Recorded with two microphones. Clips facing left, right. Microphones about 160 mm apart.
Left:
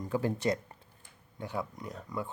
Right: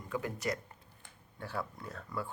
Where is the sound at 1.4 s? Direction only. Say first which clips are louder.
Left 3 dB; 15° left (ahead or behind).